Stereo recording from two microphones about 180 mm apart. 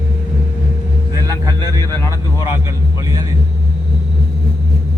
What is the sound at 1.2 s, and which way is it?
Vehicle, 20° right (ahead or behind).